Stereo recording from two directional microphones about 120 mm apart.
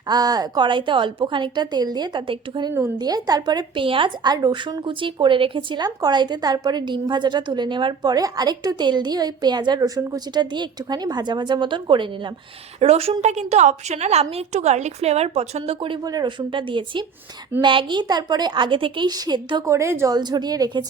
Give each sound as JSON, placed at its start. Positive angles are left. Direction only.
{"t": 0.1, "sound": "a woman's voice", "side_deg": -35}
{"t": 12.8, "sound": "a woman's voice", "side_deg": -55}
{"t": 16.0, "sound": "a woman's voice", "side_deg": -35}
{"t": 19.6, "sound": "a woman's voice", "side_deg": -25}
{"t": 20.1, "sound": "a woman's voice", "side_deg": -35}